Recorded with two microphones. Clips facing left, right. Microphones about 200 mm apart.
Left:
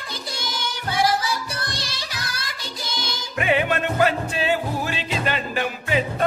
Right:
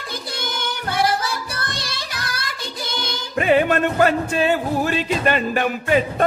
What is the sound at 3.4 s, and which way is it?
Music, 40° right (ahead or behind).